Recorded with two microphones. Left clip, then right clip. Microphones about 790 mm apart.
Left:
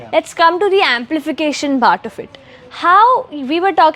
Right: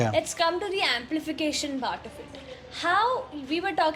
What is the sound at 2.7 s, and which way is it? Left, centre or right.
A woman's voice, left.